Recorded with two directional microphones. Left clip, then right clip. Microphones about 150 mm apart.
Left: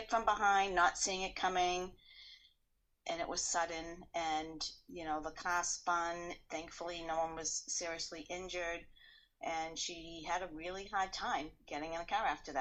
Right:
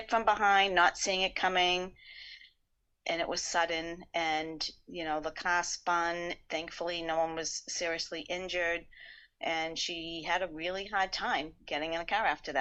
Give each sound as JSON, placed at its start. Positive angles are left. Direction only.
{"t": 0.1, "sound": "speech", "side_deg": -25}
{"t": 3.0, "sound": "speech", "side_deg": -30}
{"t": 9.4, "sound": "speech", "side_deg": -25}